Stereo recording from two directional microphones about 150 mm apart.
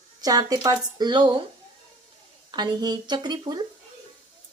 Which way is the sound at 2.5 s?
30° right (ahead or behind).